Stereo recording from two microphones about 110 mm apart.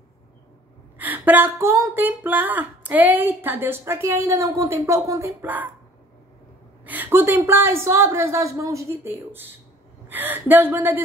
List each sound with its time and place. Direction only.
0.9 s a sound: 15° right (ahead or behind)
2.0 s speech: 15° right (ahead or behind)
5.4 s a woman's voice: 15° right (ahead or behind)
6.9 s a woman's voice: 20° right (ahead or behind)